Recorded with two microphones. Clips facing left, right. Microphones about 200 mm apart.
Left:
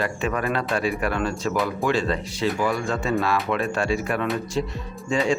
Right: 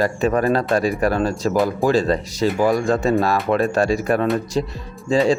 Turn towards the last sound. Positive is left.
turn(degrees=-35)  # may be behind; listen again after turning